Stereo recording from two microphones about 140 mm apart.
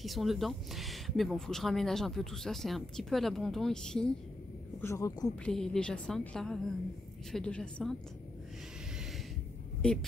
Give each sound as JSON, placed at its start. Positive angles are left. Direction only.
{"t": 0.0, "sound": "speech", "side_deg": 0}
{"t": 4.8, "sound": "speech", "side_deg": 20}
{"t": 5.3, "sound": "a woman's voice", "side_deg": 5}
{"t": 9.8, "sound": "speech", "side_deg": 5}